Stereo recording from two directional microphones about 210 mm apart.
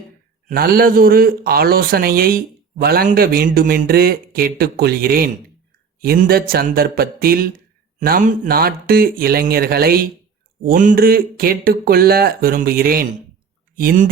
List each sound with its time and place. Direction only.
0.4 s a man's voice: 45° right (ahead or behind)